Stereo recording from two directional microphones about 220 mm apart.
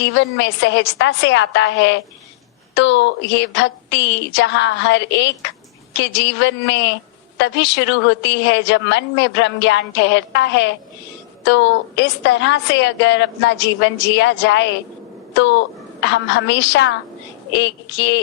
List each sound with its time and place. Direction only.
0.0 s a woman's voice: 55° left (ahead or behind)